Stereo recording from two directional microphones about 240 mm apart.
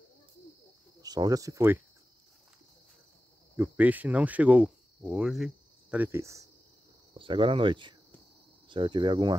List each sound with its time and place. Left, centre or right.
1.0 s speech: centre
3.5 s speech: centre